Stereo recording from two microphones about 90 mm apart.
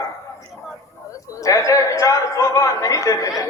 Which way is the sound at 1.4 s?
40° left (ahead or behind).